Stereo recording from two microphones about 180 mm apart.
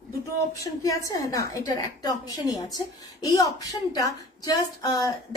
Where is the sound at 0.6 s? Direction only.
20° left (ahead or behind).